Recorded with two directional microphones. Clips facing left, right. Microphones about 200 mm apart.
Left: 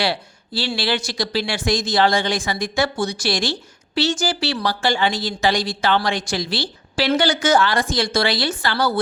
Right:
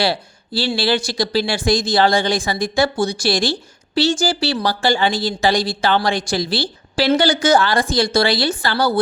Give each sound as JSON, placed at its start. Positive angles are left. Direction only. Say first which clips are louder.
{"t": 0.0, "sound": "speech", "louder": "right 3 dB", "side_deg": -35}